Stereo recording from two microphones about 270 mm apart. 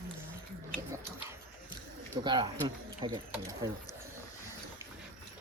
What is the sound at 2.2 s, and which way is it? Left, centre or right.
Speech, centre.